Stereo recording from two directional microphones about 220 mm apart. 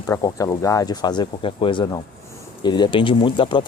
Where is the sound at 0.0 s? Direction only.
15° left (ahead or behind).